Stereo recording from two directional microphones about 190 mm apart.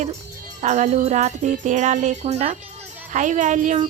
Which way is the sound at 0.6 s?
35° right (ahead or behind).